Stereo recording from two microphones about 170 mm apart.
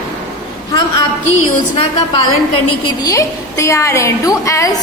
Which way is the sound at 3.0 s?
20° left (ahead or behind).